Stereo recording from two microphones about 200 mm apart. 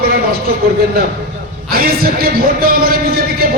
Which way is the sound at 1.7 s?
50° right (ahead or behind).